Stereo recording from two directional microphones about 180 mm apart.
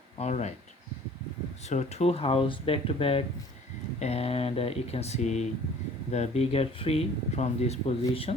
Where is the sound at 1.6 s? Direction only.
40° left (ahead or behind).